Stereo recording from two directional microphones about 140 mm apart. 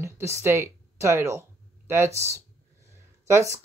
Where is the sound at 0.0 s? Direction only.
20° right (ahead or behind).